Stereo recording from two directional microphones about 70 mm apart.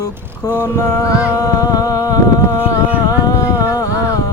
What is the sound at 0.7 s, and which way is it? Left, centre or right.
Music, left.